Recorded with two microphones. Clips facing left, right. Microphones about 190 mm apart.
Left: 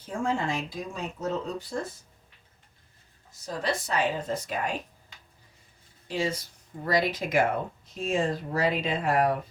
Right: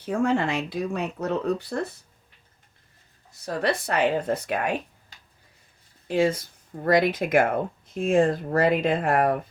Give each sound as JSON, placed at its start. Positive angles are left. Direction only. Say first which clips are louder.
{"t": 0.0, "sound": "speech", "louder": "right 6 dB", "side_deg": -70}
{"t": 3.3, "sound": "speech", "louder": "right 5 dB", "side_deg": -65}
{"t": 6.1, "sound": "speech", "louder": "right 7 dB", "side_deg": -55}